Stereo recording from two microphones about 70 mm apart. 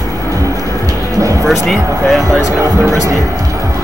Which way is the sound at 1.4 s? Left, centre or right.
Centre.